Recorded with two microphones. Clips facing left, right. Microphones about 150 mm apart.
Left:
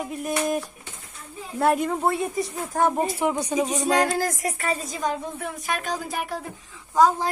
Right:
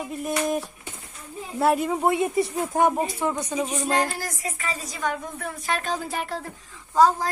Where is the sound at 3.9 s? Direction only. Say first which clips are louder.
Left 5 dB; 85° left.